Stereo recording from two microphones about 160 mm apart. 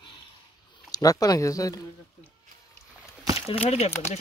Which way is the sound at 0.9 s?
20° left (ahead or behind).